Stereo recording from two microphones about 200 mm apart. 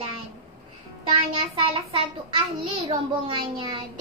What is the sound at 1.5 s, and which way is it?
A child's voice, 25° right (ahead or behind).